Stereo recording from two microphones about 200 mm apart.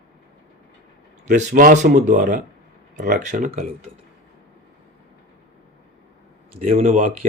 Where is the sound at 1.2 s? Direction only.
40° right (ahead or behind).